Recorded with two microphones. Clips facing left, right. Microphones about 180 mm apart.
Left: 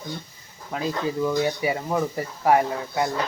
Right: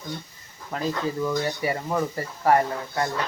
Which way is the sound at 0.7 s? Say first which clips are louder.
Left 1 dB; 10° left (ahead or behind).